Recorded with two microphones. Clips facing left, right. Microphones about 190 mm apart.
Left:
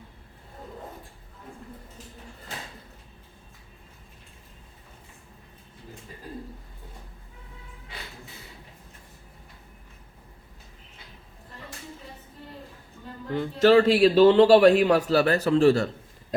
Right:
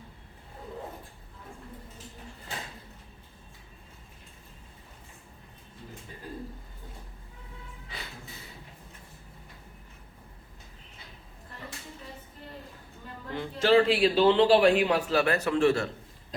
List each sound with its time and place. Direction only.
13.3 s speech: 45° left (ahead or behind)